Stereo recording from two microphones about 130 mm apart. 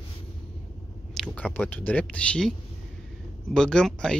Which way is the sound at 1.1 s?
10° left (ahead or behind).